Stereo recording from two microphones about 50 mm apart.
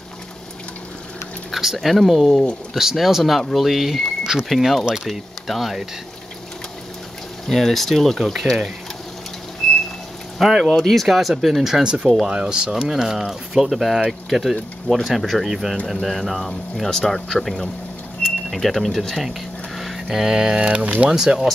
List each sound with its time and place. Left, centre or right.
1.5 s speech: centre
7.4 s speech: centre
9.6 s a sound: centre
10.4 s speech: centre
10.7 s speech: centre; by 20.9 s right
21.1 s speech: centre